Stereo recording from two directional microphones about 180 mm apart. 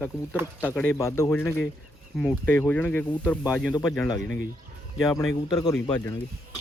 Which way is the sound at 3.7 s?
20° left (ahead or behind).